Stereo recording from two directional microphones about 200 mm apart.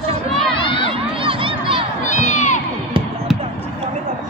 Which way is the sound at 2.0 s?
35° left (ahead or behind).